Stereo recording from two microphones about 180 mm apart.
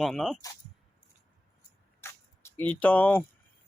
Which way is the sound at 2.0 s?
15° left (ahead or behind).